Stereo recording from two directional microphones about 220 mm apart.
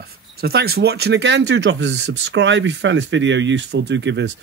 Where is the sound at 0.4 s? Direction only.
45° right (ahead or behind).